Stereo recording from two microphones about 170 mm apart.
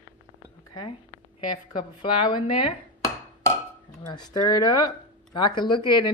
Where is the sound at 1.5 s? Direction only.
25° left (ahead or behind).